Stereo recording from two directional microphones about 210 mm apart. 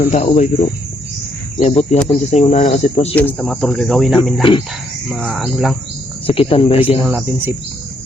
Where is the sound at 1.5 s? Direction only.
30° left (ahead or behind).